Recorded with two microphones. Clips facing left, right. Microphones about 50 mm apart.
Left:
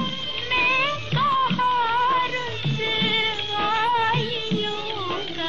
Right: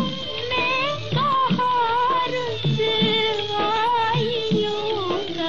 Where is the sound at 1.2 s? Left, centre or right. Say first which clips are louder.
Right 1 dB; centre.